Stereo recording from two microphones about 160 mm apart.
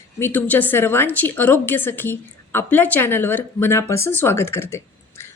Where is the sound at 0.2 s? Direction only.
10° left (ahead or behind).